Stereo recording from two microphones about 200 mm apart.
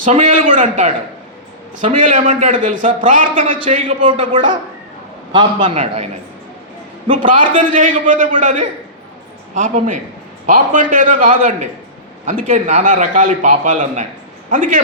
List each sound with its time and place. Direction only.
0.1 s a man's voice: 40° right (ahead or behind)
2.0 s a man's voice: 40° right (ahead or behind)
4.0 s speech: 25° right (ahead or behind)
5.6 s a man's voice: 35° right (ahead or behind)
7.6 s a man's voice: 40° right (ahead or behind)